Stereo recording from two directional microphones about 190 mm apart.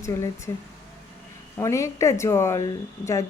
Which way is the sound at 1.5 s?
15° left (ahead or behind).